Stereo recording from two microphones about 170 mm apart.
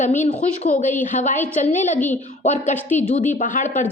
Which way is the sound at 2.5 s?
45° left (ahead or behind).